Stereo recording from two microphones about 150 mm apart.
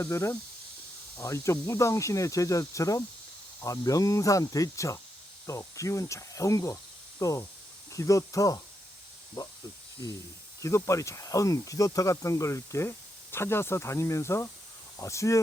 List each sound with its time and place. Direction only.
0.0 s speech: 15° left (ahead or behind)
10.6 s speech: 20° left (ahead or behind)